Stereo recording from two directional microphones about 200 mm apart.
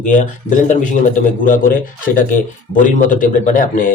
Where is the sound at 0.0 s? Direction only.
40° left (ahead or behind).